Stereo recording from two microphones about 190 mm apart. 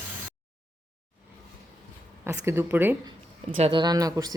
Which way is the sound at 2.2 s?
10° right (ahead or behind).